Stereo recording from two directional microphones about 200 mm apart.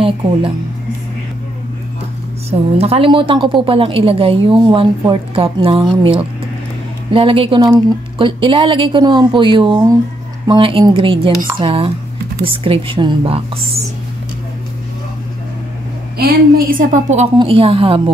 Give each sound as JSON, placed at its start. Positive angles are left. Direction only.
{"t": 0.0, "sound": "speech", "side_deg": -25}
{"t": 2.8, "sound": "a woman's voice", "side_deg": -30}
{"t": 16.2, "sound": "a woman's voice", "side_deg": -45}
{"t": 17.4, "sound": "a woman's voice", "side_deg": -25}